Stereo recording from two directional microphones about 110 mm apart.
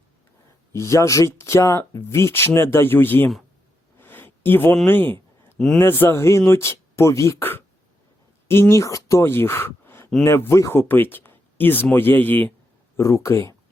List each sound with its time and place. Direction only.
0.7 s speech: 25° left (ahead or behind)
3.9 s a sound: 20° left (ahead or behind)
4.9 s speech: 15° left (ahead or behind)
5.5 s a man's voice: 5° left (ahead or behind)
5.8 s speech: 20° left (ahead or behind)
13.0 s speech: 25° left (ahead or behind)